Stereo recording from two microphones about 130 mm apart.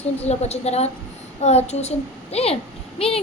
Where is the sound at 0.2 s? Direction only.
55° left (ahead or behind).